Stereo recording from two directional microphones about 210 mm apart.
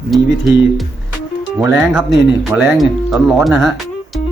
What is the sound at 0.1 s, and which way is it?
Speech, centre (ahead or behind).